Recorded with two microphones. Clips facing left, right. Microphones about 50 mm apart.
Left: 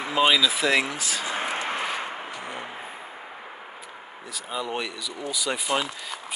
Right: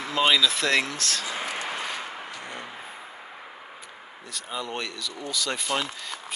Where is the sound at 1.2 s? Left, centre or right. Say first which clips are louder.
Left 3 dB; left.